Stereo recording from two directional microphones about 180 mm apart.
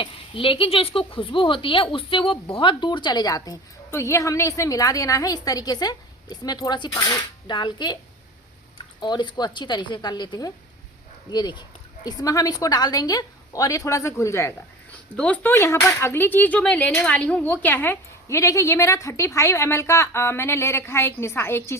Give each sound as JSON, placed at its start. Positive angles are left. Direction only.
{"t": 0.0, "sound": "speech", "side_deg": 30}
{"t": 9.0, "sound": "speech", "side_deg": 25}